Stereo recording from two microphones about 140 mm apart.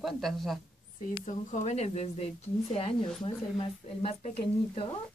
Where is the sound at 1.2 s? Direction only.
60° left (ahead or behind).